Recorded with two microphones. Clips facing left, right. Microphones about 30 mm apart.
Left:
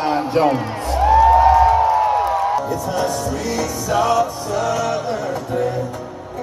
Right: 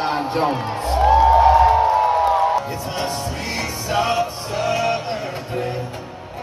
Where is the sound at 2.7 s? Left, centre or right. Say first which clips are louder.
Left 4 dB; right.